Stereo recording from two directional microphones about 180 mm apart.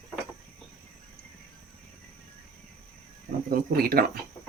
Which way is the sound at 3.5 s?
55° right (ahead or behind).